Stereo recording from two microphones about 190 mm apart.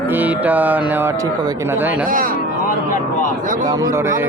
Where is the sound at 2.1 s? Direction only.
50° right (ahead or behind).